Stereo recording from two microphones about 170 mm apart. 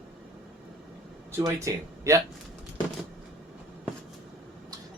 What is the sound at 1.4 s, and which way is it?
Speech, 15° right (ahead or behind).